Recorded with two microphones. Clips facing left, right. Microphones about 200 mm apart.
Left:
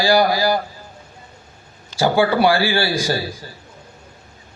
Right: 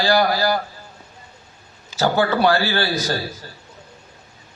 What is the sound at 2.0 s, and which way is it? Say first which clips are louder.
A man's voice: left 2 dB; 10° left (ahead or behind).